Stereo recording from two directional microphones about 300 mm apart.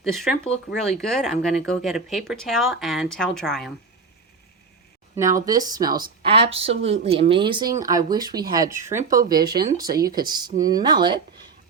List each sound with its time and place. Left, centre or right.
0.0 s speech: centre
5.1 s speech: centre
9.9 s speech: right
10.2 s speech: centre